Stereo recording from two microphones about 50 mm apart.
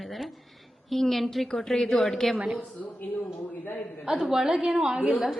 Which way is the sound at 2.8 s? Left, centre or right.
Left.